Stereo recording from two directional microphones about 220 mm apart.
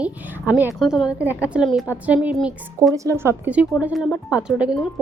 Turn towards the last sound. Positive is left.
turn(degrees=-5)  # may be behind; listen again after turning